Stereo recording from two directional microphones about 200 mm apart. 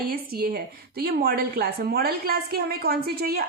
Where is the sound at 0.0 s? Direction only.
50° right (ahead or behind).